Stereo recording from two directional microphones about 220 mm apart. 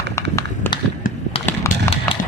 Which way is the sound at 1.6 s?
25° left (ahead or behind).